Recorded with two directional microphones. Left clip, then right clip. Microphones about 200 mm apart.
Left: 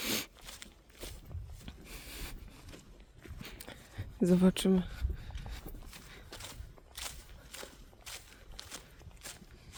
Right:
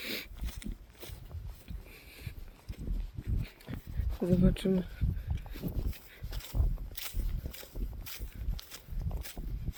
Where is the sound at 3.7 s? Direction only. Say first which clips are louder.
Right 3 dB; 30° left (ahead or behind).